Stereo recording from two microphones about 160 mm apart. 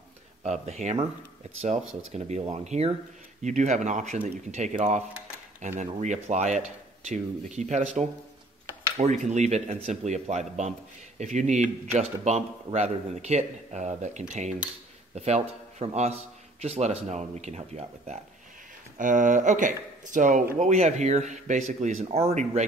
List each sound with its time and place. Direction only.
0.4 s speech: 45° right (ahead or behind)
2.1 s a man's voice: 45° right (ahead or behind)